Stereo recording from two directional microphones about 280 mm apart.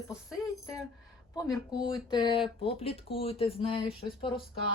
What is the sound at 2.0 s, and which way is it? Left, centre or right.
Speech, centre.